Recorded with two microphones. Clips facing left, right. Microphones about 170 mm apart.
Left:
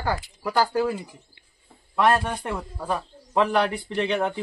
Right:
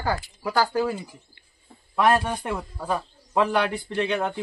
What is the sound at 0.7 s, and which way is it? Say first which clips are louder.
Speech: left 1 dB; centre (ahead or behind).